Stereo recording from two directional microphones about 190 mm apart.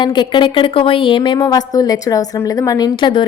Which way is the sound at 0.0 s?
25° left (ahead or behind).